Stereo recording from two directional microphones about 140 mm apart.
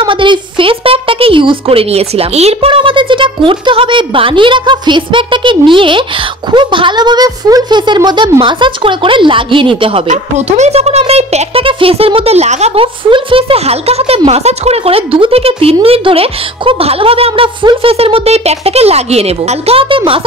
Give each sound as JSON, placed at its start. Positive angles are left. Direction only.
{"t": 0.0, "sound": "a woman's voice", "side_deg": -35}
{"t": 10.0, "sound": "speech", "side_deg": -55}